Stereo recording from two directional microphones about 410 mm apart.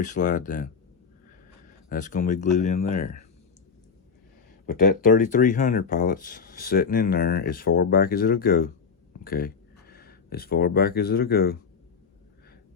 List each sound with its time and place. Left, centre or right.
0.0 s speech: centre
1.9 s speech: centre
4.6 s speech: centre